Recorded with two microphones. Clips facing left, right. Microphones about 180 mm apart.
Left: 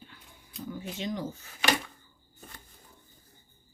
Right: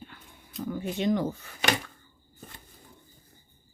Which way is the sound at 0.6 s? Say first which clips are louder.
Right 7 dB; 60° right (ahead or behind).